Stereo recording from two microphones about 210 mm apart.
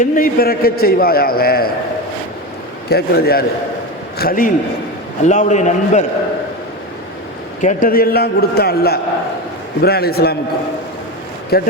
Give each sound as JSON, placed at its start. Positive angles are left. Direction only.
{"t": 0.0, "sound": "a man's voice", "side_deg": 45}
{"t": 2.9, "sound": "a man's voice", "side_deg": 50}
{"t": 7.6, "sound": "a man's voice", "side_deg": 40}
{"t": 11.5, "sound": "a man's voice", "side_deg": 50}